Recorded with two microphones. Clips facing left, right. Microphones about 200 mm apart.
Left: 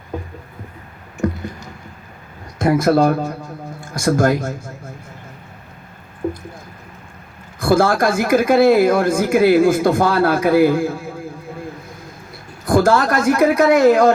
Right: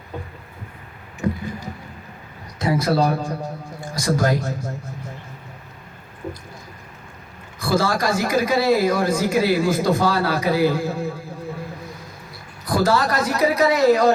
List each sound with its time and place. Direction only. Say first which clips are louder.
2.6 s speech: left 5 dB; 50° left (ahead or behind)
6.2 s a sound: left 8 dB; 50° left (ahead or behind)
7.6 s speech: left 6 dB; 50° left (ahead or behind)
12.6 s speech: left 5 dB; 50° left (ahead or behind)